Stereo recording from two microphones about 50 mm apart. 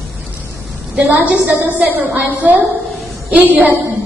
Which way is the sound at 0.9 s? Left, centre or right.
Right.